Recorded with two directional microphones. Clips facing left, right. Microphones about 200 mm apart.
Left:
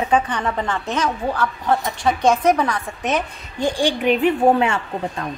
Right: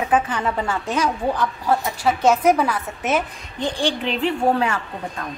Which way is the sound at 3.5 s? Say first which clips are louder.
Left 3 dB; 15° left (ahead or behind).